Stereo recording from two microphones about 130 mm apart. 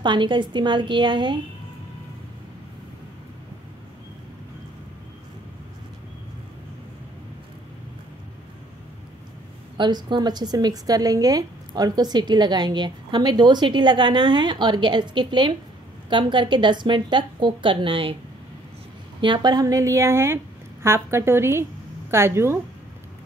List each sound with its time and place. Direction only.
0.0 s a woman's voice: 35° right (ahead or behind)
9.8 s a woman's voice: 35° right (ahead or behind)
19.2 s a woman's voice: 35° right (ahead or behind); by 22.6 s 20° right (ahead or behind)